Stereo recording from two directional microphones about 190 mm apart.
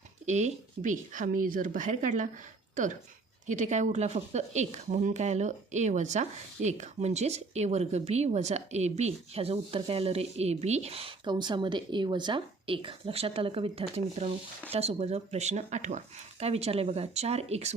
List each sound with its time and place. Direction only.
0.3 s a woman's voice: 35° right (ahead or behind)